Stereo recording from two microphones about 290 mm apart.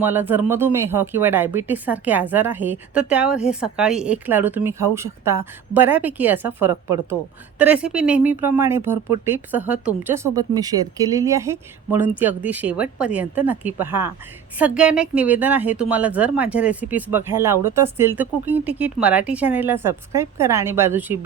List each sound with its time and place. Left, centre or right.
0.0 s speech: centre